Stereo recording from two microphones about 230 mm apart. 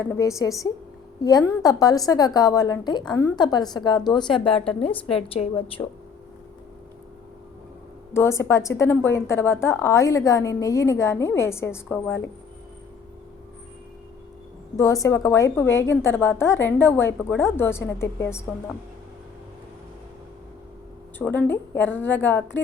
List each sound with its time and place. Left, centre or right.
0.1 s a woman's voice: centre
8.1 s a woman's voice: centre
14.8 s a woman's voice: centre
21.2 s a woman's voice: centre